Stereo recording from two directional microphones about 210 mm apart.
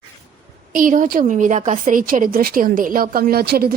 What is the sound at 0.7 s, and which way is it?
A woman's voice, 40° right (ahead or behind).